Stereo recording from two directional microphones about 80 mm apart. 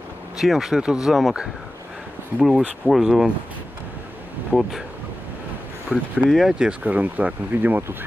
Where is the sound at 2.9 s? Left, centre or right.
Centre.